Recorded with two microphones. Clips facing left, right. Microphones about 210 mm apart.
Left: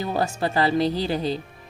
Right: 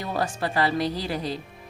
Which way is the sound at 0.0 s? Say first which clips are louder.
Left 3 dB; 25° left (ahead or behind).